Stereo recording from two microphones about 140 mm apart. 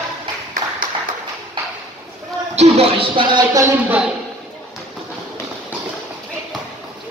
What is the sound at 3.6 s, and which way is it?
Speech, 10° right (ahead or behind).